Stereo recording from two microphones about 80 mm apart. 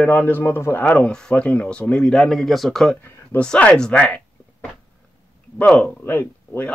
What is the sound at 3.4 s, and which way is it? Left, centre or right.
Speech, centre.